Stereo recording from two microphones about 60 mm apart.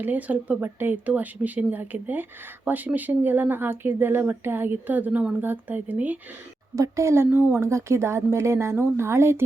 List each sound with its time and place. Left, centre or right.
0.0 s speech: right
6.7 s speech: right
7.3 s speech: right
7.6 s a woman's voice: right